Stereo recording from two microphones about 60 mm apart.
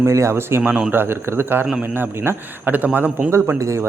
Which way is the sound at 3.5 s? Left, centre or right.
Right.